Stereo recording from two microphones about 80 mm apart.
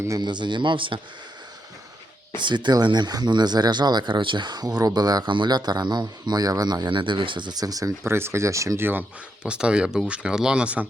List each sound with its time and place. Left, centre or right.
0.2 s speech: right
2.4 s speech: right
8.0 s speech: right
9.4 s speech: centre